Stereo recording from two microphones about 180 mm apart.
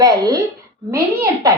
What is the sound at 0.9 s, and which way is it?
Speech, 15° right (ahead or behind).